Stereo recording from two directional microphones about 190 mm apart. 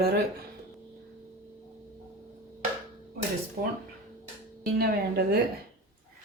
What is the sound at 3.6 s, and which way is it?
Speech, 45° right (ahead or behind).